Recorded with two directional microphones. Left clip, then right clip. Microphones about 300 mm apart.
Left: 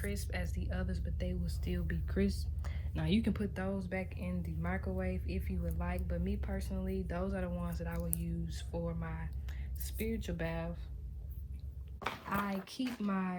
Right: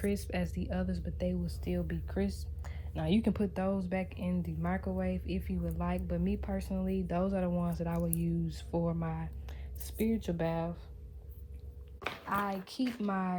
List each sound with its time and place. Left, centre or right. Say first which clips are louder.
0.0 s speech: right 6 dB; right
12.3 s speech: right 6 dB; centre